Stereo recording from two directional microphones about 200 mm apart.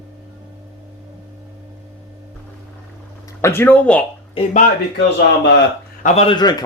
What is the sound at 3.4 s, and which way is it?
Speech, 10° left (ahead or behind).